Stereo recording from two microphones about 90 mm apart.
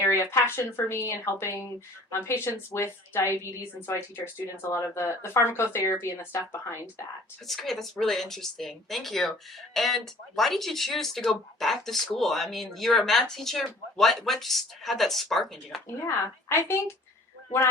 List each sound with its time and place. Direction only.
0.0 s speech: 30° left (ahead or behind)
7.4 s speech: centre (ahead or behind)
16.0 s speech: 30° left (ahead or behind)